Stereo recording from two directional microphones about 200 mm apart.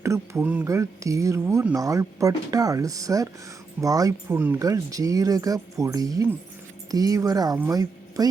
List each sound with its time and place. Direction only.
0.0 s speech: 10° right (ahead or behind)